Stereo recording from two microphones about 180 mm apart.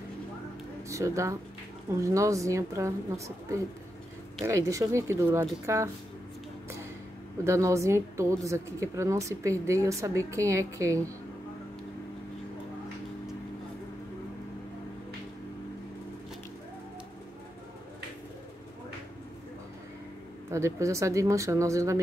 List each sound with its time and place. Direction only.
0.8 s a woman's voice: 15° right (ahead or behind)
7.4 s a woman's voice: 15° right (ahead or behind)
20.4 s a woman's voice: 15° right (ahead or behind)